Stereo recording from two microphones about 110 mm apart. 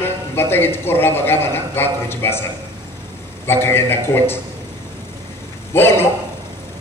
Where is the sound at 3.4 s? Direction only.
20° left (ahead or behind).